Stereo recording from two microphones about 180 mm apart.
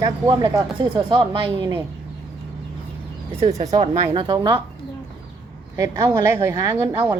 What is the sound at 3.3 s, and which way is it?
Speech, 40° right (ahead or behind).